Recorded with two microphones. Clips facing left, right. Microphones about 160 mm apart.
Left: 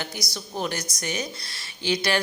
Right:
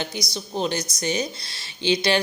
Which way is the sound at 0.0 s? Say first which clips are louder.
Right 4 dB; 25° right (ahead or behind).